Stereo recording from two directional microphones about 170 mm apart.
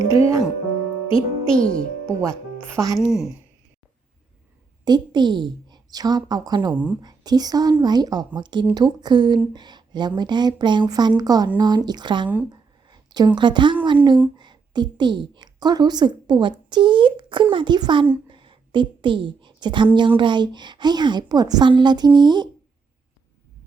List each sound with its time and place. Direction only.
0.1 s speech: 20° right (ahead or behind)
1.5 s a child's voice: 5° left (ahead or behind)
2.7 s a woman's voice: 20° right (ahead or behind)
3.0 s a woman's voice: centre (ahead or behind)
4.9 s a woman's voice: 25° right (ahead or behind)
6.7 s a woman's voice: 10° right (ahead or behind)
7.0 s a woman's voice: 25° right (ahead or behind)
12.5 s a sound: 25° right (ahead or behind)
13.8 s a woman's voice: 25° right (ahead or behind)